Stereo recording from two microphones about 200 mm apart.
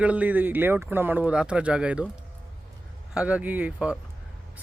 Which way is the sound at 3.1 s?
5° right (ahead or behind).